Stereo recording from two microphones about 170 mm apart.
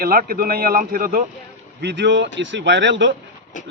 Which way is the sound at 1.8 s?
90° right.